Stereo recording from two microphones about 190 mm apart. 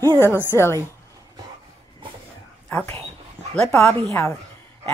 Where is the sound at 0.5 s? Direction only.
15° left (ahead or behind).